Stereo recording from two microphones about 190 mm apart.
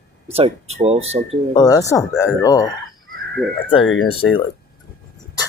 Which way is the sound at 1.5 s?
20° left (ahead or behind).